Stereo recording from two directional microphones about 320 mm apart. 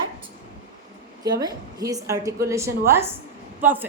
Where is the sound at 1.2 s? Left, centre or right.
Centre.